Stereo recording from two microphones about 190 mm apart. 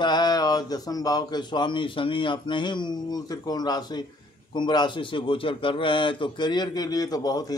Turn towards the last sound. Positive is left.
turn(degrees=20)  # may be behind; listen again after turning